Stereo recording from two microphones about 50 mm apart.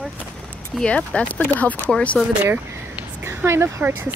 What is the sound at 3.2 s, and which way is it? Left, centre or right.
Speech, right.